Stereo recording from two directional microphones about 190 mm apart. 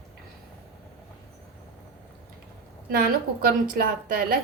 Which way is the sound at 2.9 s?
55° right (ahead or behind).